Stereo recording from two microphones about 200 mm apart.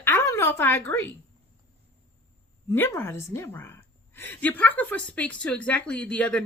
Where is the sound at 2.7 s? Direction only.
10° left (ahead or behind).